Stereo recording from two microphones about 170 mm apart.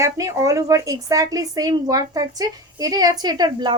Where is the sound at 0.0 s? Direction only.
20° right (ahead or behind).